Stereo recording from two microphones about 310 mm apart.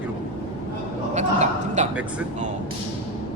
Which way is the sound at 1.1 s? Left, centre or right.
Right.